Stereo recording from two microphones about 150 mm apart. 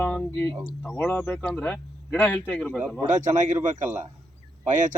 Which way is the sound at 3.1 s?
55° right (ahead or behind).